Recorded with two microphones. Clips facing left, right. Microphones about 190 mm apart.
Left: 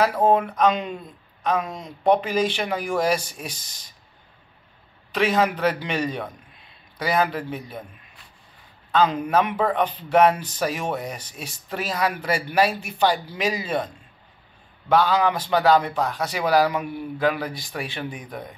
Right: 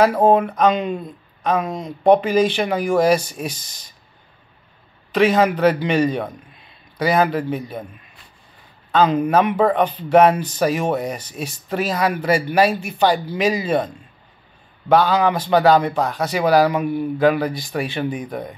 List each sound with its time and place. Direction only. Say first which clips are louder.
0.0 s speech: right 5 dB; 50° right (ahead or behind)
5.1 s speech: right 5 dB; 50° right (ahead or behind)
8.9 s speech: right 4 dB; 55° right (ahead or behind)
15.0 s speech: right 2 dB; 55° right (ahead or behind)
16.3 s speech: right 5 dB; 55° right (ahead or behind)